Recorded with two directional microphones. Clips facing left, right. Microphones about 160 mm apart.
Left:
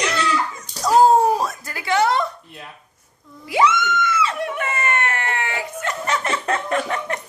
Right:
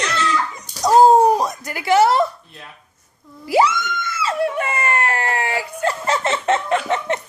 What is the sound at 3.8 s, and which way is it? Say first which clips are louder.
Screaming: left 5 dB; 35° right (ahead or behind).